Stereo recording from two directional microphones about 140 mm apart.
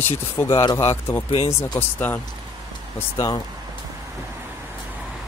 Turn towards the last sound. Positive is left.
turn(degrees=25)  # may be behind; listen again after turning